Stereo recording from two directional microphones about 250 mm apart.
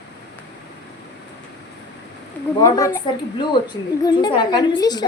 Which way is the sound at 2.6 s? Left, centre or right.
Centre.